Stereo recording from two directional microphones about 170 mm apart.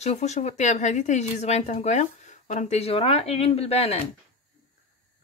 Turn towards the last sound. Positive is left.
turn(degrees=35)  # may be behind; listen again after turning